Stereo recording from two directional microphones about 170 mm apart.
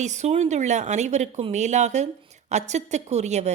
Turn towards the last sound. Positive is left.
turn(degrees=-40)  # may be behind; listen again after turning